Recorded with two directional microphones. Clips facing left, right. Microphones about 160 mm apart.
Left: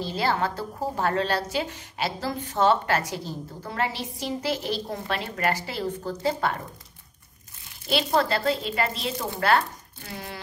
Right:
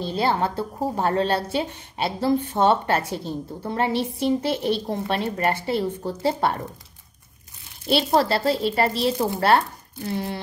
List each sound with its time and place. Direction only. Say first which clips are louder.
0.2 s a woman's voice: right 3 dB; 25° right (ahead or behind)
8.1 s chopping: right 2 dB; 30° right (ahead or behind)